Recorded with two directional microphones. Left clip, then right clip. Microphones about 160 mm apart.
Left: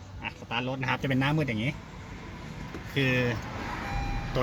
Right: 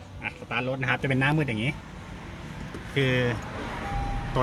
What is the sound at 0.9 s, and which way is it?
Speech, 5° left (ahead or behind).